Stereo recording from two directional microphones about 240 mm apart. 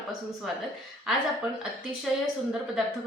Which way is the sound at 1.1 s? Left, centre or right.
Centre.